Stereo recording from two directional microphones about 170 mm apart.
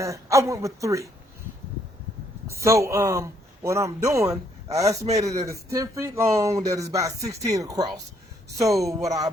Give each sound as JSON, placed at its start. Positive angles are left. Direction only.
{"t": 0.0, "sound": "a woman's voice", "side_deg": -20}
{"t": 2.5, "sound": "speech", "side_deg": -15}